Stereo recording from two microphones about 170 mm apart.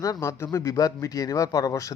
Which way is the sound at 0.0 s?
20° left (ahead or behind).